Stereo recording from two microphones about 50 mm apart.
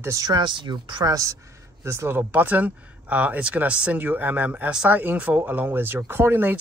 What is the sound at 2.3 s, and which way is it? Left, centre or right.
Speech, right.